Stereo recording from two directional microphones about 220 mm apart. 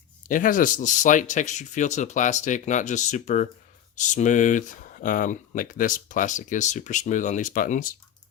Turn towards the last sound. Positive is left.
turn(degrees=40)  # may be behind; listen again after turning